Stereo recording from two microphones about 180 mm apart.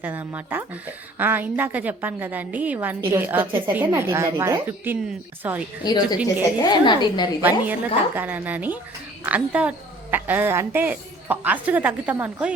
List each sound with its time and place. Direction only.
0.0 s a woman's voice: 10° right (ahead or behind)
5.8 s a woman's voice: 25° left (ahead or behind)
7.4 s a woman's voice: 10° right (ahead or behind)